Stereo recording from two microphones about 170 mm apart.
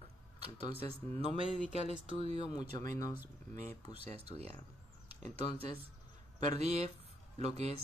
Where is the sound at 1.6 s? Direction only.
35° right (ahead or behind).